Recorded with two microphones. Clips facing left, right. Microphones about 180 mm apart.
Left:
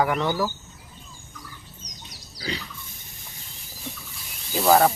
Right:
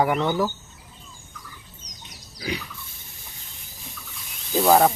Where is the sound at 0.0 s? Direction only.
25° right (ahead or behind).